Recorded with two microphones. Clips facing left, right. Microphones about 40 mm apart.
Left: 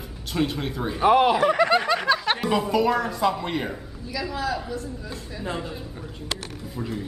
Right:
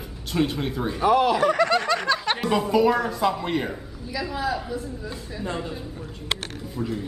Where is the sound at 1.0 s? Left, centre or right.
Left; by 7.1 s centre.